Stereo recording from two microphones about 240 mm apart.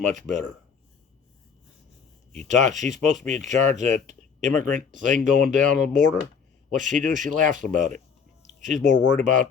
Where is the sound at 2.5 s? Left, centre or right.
Right.